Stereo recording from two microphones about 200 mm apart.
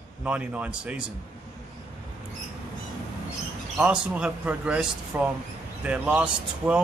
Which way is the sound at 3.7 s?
5° right (ahead or behind).